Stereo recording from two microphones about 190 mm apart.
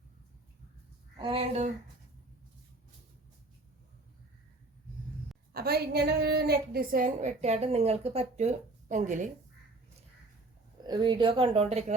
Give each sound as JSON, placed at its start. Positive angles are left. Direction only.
{"t": 1.2, "sound": "a woman's voice", "side_deg": -30}
{"t": 5.5, "sound": "a woman's voice", "side_deg": -55}
{"t": 10.8, "sound": "speech", "side_deg": -20}